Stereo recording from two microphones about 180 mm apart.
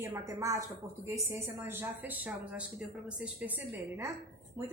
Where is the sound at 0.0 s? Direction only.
15° right (ahead or behind).